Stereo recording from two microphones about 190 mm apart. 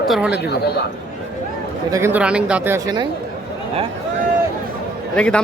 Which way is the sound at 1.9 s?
15° right (ahead or behind).